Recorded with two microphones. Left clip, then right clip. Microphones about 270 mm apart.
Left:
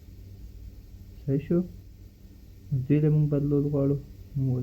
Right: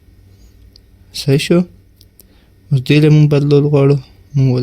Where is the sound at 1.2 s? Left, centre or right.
Right.